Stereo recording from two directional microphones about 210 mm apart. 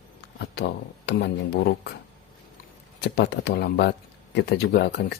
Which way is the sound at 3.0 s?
55° left (ahead or behind).